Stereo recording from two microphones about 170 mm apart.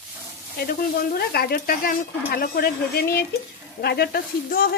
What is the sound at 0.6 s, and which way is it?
Speech, 65° left (ahead or behind).